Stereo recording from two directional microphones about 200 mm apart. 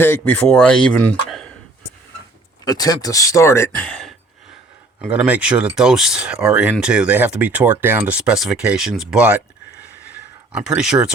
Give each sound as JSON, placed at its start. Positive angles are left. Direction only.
{"t": 0.0, "sound": "speech", "side_deg": 10}
{"t": 2.6, "sound": "speech", "side_deg": 20}
{"t": 4.9, "sound": "speech", "side_deg": -5}
{"t": 10.5, "sound": "speech", "side_deg": -5}